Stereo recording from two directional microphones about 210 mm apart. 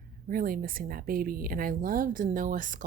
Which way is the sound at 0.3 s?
45° right (ahead or behind).